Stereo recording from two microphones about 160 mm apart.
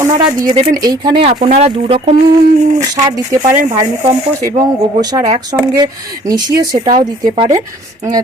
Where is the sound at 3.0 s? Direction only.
20° right (ahead or behind).